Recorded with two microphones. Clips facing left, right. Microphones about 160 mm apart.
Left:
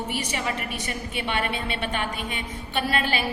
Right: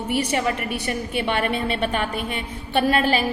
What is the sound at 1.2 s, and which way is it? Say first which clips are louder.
A woman's voice: right 5 dB; 45° right (ahead or behind).